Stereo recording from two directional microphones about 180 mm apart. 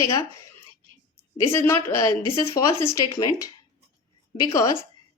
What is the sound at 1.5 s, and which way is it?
A woman's voice, 15° left (ahead or behind).